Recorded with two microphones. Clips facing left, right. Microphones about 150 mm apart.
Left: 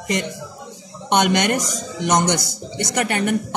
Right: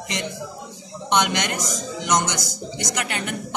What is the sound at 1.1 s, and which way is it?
A woman's voice, 55° left (ahead or behind).